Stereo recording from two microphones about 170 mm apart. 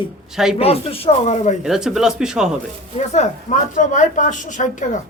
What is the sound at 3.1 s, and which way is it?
A woman's voice, 45° left (ahead or behind).